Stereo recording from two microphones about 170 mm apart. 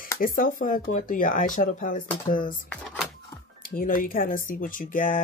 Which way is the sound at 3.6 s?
55° left (ahead or behind).